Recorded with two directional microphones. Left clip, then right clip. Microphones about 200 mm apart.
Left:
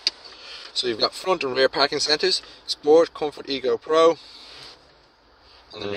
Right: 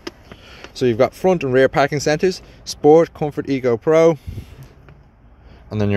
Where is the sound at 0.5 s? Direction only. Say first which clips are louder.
Right 6 dB; 15° right (ahead or behind).